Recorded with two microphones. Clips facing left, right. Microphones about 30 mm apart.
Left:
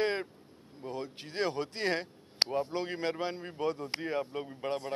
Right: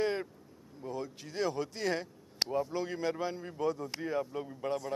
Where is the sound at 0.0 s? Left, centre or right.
Left.